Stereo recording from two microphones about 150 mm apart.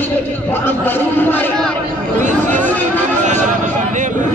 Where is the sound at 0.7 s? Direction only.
15° left (ahead or behind).